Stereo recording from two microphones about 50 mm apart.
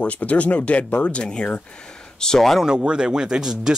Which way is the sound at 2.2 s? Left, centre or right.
Centre.